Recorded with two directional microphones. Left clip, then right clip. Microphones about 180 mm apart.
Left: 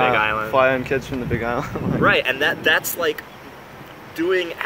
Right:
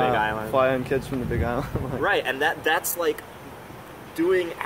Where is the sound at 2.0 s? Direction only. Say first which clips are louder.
Left 5 dB; 30° right (ahead or behind).